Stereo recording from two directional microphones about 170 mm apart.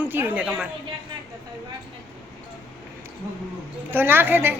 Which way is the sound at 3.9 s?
15° right (ahead or behind).